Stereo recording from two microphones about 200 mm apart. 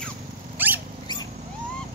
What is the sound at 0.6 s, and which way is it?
Wild animals, 10° right (ahead or behind).